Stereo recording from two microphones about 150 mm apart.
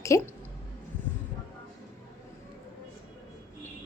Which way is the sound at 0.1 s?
20° left (ahead or behind).